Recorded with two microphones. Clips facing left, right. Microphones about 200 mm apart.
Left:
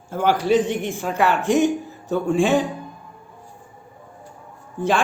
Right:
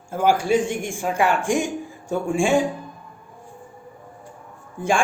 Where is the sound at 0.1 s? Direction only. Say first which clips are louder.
Left 1 dB; 10° right (ahead or behind).